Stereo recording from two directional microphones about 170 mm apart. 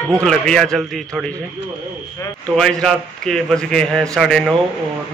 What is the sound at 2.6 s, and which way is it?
A man's voice, 5° left (ahead or behind).